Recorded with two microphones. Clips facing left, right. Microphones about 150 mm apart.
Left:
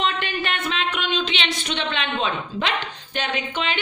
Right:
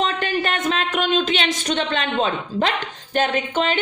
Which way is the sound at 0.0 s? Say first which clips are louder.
Right 3 dB; 40° right (ahead or behind).